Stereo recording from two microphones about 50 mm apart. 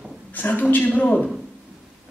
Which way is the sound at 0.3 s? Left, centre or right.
Left.